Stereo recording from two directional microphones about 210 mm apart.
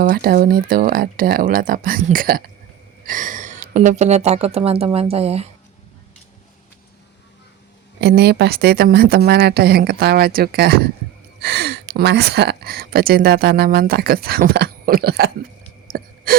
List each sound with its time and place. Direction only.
0.0 s speech: 45° right (ahead or behind); by 5.5 s 30° right (ahead or behind)
8.0 s speech: 50° right (ahead or behind)
16.3 s wheeze: 45° right (ahead or behind)